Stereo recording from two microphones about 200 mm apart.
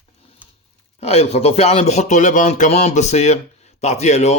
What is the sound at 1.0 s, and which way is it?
Speech, 30° left (ahead or behind).